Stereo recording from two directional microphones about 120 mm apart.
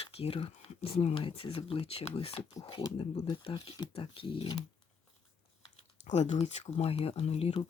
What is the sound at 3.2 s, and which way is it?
Speech, 45° left (ahead or behind).